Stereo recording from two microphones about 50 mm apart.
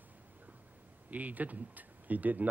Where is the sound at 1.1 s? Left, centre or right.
Right.